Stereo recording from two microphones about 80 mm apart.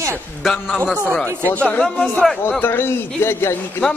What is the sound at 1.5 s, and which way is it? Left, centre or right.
Speech, centre.